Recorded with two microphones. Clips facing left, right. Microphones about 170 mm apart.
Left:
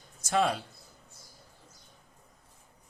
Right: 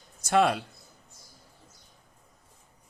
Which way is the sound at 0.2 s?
70° right (ahead or behind).